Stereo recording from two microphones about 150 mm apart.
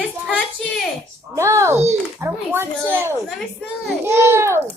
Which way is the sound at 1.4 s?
20° right (ahead or behind).